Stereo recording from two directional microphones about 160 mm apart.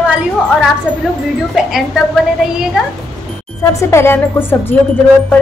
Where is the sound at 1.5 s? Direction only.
5° right (ahead or behind).